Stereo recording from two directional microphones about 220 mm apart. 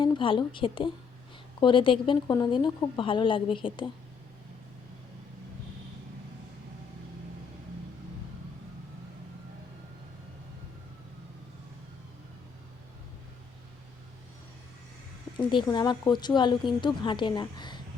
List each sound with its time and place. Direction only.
0.0 s speech: 25° left (ahead or behind)
15.4 s speech: 20° left (ahead or behind)